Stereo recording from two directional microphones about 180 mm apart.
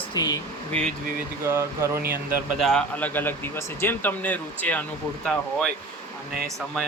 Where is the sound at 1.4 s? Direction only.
15° right (ahead or behind).